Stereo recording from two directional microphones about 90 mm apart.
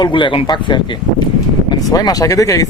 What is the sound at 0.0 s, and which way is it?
Speech, 60° left (ahead or behind).